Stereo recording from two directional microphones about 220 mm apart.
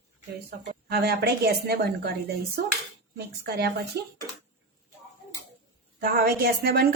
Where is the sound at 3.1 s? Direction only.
45° right (ahead or behind).